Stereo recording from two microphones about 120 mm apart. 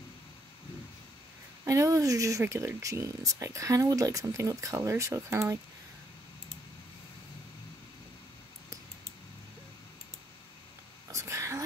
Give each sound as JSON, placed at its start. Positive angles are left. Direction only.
{"t": 1.6, "sound": "speech", "side_deg": -30}
{"t": 11.1, "sound": "whispering", "side_deg": -25}